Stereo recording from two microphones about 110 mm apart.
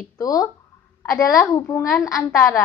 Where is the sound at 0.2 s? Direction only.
35° left (ahead or behind).